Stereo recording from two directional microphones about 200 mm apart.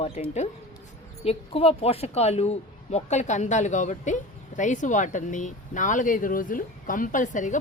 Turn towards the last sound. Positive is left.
turn(degrees=40)  # may be behind; listen again after turning